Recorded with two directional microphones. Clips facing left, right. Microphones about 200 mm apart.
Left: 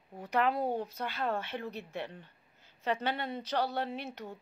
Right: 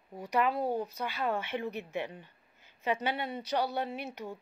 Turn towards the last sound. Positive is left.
turn(degrees=-10)  # may be behind; listen again after turning